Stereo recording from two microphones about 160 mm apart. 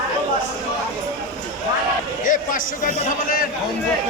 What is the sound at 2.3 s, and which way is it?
A man's voice, 50° left (ahead or behind).